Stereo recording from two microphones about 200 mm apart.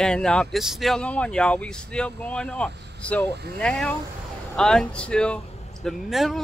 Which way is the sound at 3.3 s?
55° right (ahead or behind).